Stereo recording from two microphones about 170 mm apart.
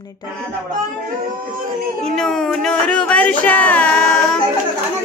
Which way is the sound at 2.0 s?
5° left (ahead or behind).